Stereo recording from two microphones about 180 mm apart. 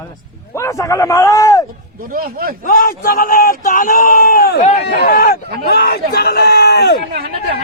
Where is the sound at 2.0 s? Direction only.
55° right (ahead or behind).